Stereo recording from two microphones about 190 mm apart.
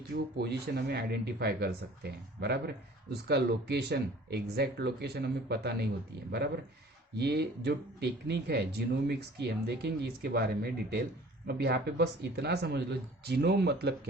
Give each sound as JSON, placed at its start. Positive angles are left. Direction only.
{"t": 0.1, "sound": "speech", "side_deg": -60}
{"t": 7.2, "sound": "speech", "side_deg": -60}